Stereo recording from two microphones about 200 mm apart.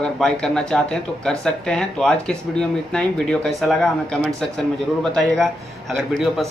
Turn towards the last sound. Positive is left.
turn(degrees=0)  # may be behind; listen again after turning